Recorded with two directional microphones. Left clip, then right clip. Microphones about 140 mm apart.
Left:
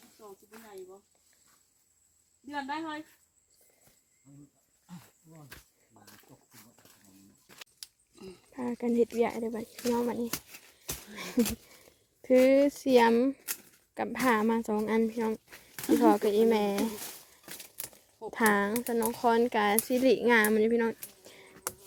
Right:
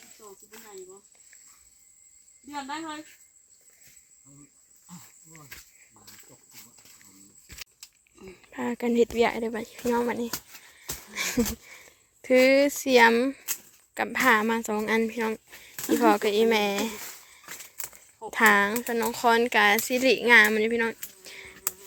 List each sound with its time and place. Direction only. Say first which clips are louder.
0.2 s snake: right 1 dB; 15° left (ahead or behind)
2.5 s speech: right 1 dB; 15° right (ahead or behind)
6.5 s dog: right 6 dB; 5° right (ahead or behind)
8.2 s speech: right 5 dB; 5° right (ahead or behind)
10.8 s dog: right 9 dB; 5° left (ahead or behind)
11.6 s speech: right 8 dB; 10° left (ahead or behind)
15.6 s a sound: right 2 dB; 15° left (ahead or behind)
16.2 s speech: right 3 dB; 15° left (ahead or behind)
17.0 s a sound: right 3 dB; 65° left (ahead or behind)
18.3 s speech: right 7 dB; 20° left (ahead or behind)
21.2 s a sound: right 13 dB; 20° left (ahead or behind)